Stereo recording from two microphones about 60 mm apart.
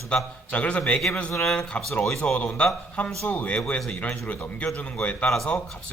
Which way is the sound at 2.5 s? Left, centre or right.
Left.